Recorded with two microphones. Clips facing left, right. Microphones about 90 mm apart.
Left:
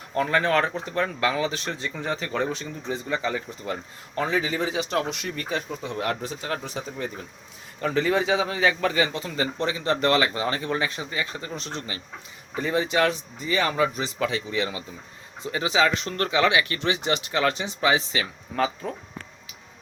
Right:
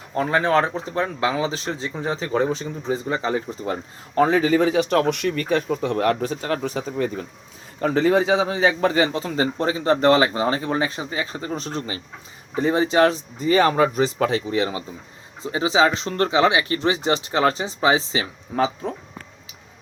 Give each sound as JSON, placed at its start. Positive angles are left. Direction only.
{"t": 0.2, "sound": "speech", "side_deg": -25}